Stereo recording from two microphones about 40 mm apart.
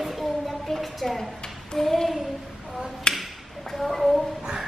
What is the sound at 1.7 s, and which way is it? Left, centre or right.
Child singing, centre.